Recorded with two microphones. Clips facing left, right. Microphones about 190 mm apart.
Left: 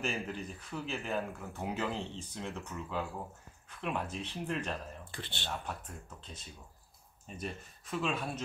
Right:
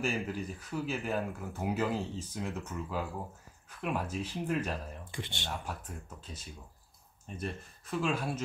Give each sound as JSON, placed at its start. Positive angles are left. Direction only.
{"t": 0.0, "sound": "speech", "side_deg": -5}
{"t": 5.5, "sound": "speech", "side_deg": 0}